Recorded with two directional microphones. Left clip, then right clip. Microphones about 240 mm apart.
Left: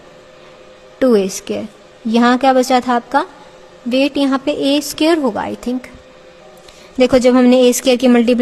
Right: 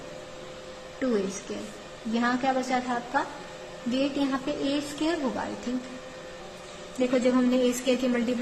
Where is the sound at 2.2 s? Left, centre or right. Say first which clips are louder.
Left 15 dB; left.